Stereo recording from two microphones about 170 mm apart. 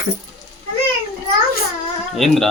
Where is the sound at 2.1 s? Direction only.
Centre (ahead or behind).